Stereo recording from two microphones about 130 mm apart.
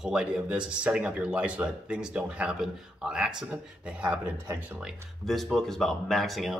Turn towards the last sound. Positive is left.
turn(degrees=0)  # may be behind; listen again after turning